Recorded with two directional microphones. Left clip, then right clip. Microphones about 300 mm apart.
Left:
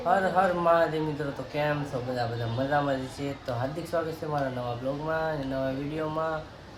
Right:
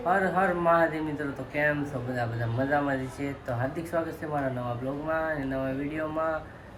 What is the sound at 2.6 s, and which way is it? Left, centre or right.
Speech, centre.